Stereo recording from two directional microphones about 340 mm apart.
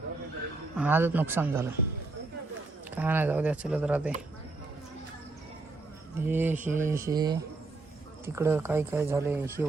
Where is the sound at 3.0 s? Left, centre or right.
Centre.